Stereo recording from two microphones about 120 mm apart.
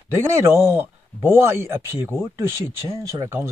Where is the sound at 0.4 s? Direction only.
20° right (ahead or behind).